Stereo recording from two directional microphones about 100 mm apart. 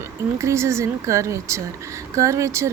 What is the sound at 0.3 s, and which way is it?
Speech, 30° right (ahead or behind).